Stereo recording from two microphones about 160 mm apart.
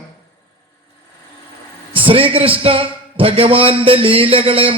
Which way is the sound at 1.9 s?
35° right (ahead or behind).